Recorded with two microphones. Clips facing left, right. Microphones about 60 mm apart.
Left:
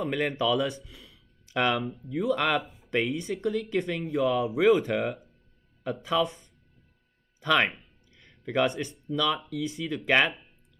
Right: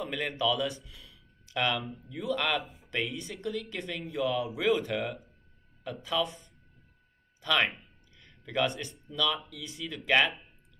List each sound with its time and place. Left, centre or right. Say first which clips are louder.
0.1 s speech: left 3 dB; left
0.9 s a sound: left 2 dB; left
2.0 s speech: left 5 dB; left
7.4 s speech: left 4 dB; left